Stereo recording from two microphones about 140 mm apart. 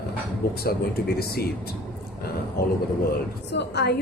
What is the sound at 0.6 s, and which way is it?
Speech, 90° left.